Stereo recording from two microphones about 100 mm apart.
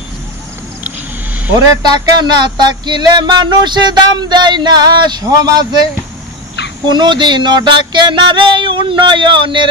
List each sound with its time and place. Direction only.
1.8 s music: 45° right (ahead or behind)
6.9 s music: 50° right (ahead or behind)